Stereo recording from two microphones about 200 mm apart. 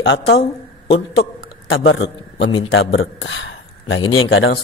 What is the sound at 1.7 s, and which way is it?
A man's voice, 70° left (ahead or behind).